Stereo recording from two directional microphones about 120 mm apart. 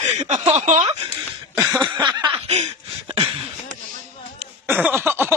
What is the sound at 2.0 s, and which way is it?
Snicker, 40° right (ahead or behind).